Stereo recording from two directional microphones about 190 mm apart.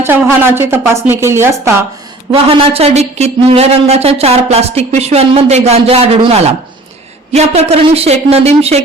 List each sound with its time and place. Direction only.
0.0 s speech: 10° right (ahead or behind)
2.3 s speech: 30° right (ahead or behind)